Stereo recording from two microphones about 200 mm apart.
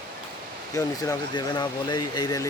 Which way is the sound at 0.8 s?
20° left (ahead or behind).